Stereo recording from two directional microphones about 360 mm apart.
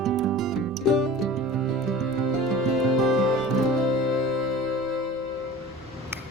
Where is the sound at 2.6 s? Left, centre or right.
Centre.